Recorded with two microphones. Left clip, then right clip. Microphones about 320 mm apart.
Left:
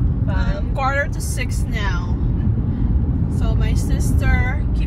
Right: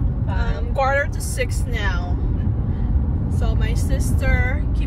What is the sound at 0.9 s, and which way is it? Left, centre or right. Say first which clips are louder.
Speech: right 1 dB; centre.